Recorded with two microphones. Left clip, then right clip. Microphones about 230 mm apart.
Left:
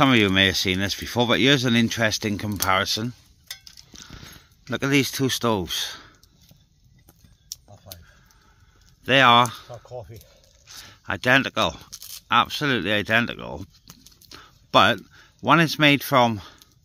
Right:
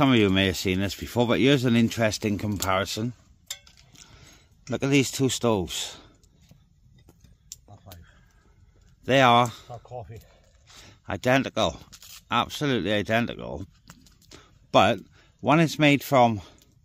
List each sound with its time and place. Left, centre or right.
0.0 s speech: centre
3.9 s a sound: centre
9.0 s speech: centre
9.7 s speech: left
10.7 s speech: centre